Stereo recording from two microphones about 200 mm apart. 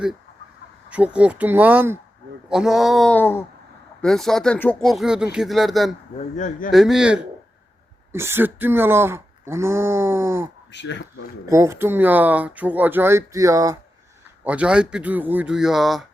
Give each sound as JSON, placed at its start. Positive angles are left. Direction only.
{"t": 0.9, "sound": "speech", "side_deg": -5}
{"t": 6.1, "sound": "speech", "side_deg": 40}
{"t": 6.7, "sound": "speech", "side_deg": 0}
{"t": 10.7, "sound": "speech", "side_deg": 60}
{"t": 11.4, "sound": "speech", "side_deg": -15}